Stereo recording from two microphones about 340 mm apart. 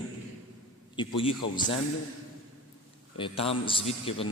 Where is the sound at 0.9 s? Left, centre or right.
Centre.